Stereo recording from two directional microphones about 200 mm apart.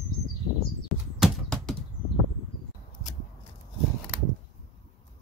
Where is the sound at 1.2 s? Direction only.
Centre (ahead or behind).